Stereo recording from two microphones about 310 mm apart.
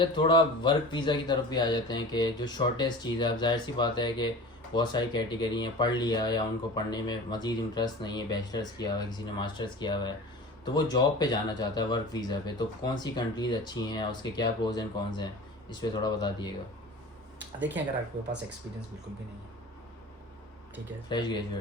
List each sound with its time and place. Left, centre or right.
0.0 s speech: centre
21.1 s speech: centre